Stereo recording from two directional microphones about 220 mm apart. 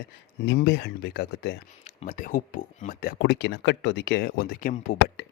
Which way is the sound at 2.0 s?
35° left (ahead or behind).